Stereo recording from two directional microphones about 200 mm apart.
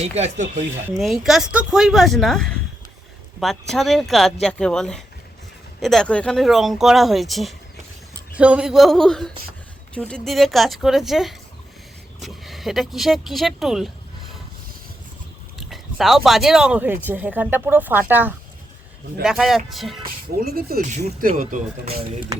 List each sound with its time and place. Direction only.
0.0 s speech: 35° right (ahead or behind)
0.9 s speech: centre (ahead or behind)
15.5 s speech: centre (ahead or behind)
20.4 s speech: 50° right (ahead or behind)